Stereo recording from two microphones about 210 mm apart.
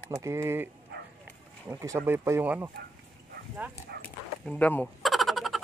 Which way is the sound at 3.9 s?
50° right (ahead or behind).